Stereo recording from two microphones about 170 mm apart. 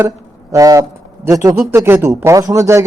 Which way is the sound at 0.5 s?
20° right (ahead or behind).